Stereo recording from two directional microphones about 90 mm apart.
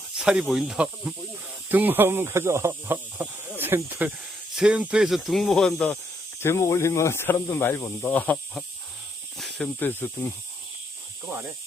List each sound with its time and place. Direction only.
0.2 s speech: 10° right (ahead or behind)
1.7 s speech: 20° right (ahead or behind)
4.5 s speech: 10° right (ahead or behind)
6.4 s speech: 30° left (ahead or behind)
8.1 s speech: 15° left (ahead or behind)
9.4 s snake: centre (ahead or behind)
9.7 s speech: 25° left (ahead or behind)